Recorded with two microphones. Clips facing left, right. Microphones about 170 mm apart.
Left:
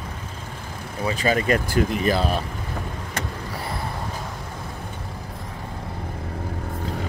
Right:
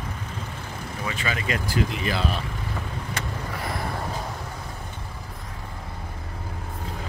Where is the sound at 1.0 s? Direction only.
35° left (ahead or behind).